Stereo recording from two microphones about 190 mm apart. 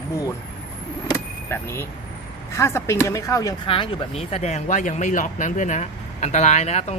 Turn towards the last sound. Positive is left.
turn(degrees=35)  # may be behind; listen again after turning